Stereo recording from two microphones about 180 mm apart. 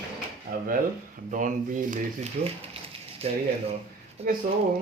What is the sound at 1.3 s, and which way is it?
Speech, 45° right (ahead or behind).